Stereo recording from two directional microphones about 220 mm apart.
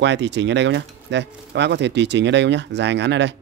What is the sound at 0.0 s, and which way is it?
Speech, 55° right (ahead or behind).